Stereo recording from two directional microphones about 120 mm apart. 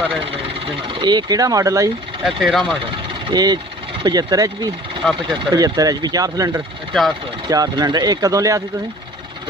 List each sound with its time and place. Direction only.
0.8 s speech: 40° right (ahead or behind)
2.2 s speech: centre (ahead or behind)
3.3 s speech: 35° right (ahead or behind)
6.9 s speech: centre (ahead or behind)
7.4 s speech: 35° right (ahead or behind)